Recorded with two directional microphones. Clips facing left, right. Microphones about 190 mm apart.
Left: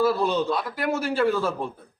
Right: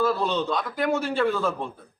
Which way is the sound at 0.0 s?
5° left (ahead or behind).